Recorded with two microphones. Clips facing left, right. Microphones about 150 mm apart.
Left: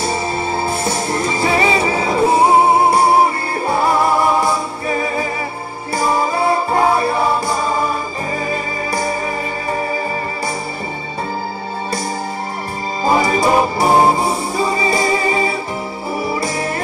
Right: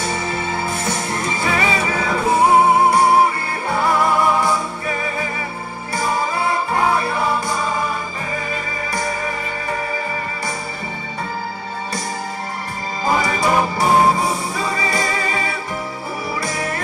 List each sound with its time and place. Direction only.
0.0 s music: 35° left (ahead or behind)
13.0 s music: 30° left (ahead or behind)